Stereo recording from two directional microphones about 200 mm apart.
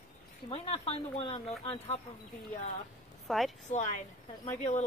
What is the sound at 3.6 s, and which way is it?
Speech, 35° left (ahead or behind).